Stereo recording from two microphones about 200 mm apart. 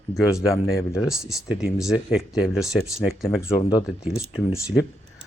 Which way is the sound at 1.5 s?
5° right (ahead or behind).